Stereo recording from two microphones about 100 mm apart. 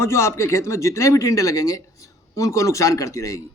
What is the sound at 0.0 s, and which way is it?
A man's voice, 25° left (ahead or behind).